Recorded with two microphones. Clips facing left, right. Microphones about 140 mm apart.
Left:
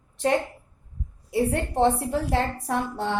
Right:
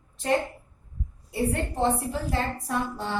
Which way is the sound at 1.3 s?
70° left (ahead or behind).